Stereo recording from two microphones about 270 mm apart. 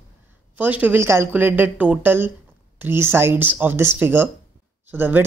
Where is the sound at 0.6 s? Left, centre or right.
Centre.